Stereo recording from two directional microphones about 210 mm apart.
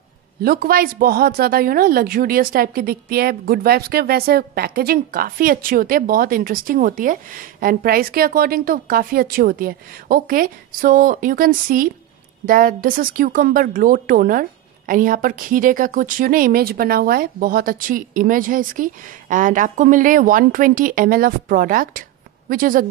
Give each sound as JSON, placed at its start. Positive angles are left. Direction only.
{"t": 0.4, "sound": "a woman's voice", "side_deg": -45}